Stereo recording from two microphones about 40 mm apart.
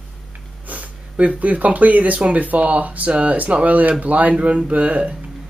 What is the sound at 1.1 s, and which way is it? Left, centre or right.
Speech, right.